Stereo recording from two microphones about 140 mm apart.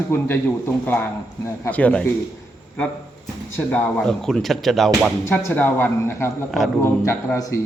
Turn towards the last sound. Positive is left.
turn(degrees=20)  # may be behind; listen again after turning